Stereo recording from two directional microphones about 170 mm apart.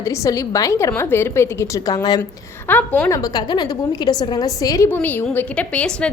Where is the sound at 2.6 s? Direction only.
10° left (ahead or behind).